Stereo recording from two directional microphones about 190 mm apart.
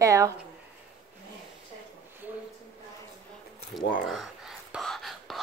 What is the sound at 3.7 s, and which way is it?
Speech, centre (ahead or behind).